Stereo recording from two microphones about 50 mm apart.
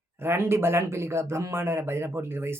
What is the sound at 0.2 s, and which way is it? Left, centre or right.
A man's voice, right.